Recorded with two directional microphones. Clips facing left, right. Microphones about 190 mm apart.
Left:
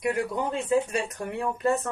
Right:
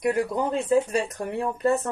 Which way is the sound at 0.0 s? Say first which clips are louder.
Right 3 dB; 35° right (ahead or behind).